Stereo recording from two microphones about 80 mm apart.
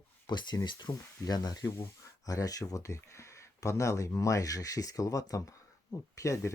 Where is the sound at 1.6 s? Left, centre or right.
Left.